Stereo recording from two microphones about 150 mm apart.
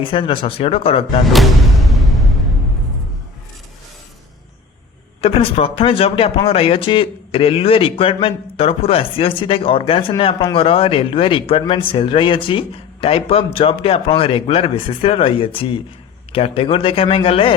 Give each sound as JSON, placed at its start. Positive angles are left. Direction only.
{"t": 0.0, "sound": "speech", "side_deg": 35}
{"t": 1.2, "sound": "speech", "side_deg": 0}
{"t": 5.2, "sound": "speech", "side_deg": 40}